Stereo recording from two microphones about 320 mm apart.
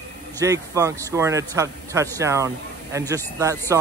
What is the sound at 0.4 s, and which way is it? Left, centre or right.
A man's voice, centre.